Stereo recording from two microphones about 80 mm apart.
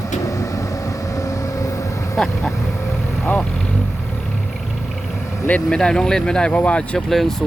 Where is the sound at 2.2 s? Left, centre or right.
Centre.